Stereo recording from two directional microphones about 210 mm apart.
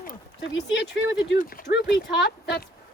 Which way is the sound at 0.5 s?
55° left (ahead or behind).